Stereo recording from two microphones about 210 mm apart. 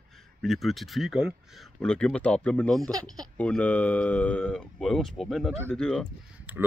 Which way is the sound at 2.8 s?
20° right (ahead or behind).